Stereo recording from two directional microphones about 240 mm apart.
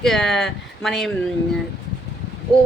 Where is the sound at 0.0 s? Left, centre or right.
Centre.